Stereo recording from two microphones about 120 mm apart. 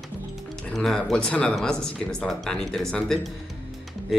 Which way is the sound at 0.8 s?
5° left (ahead or behind).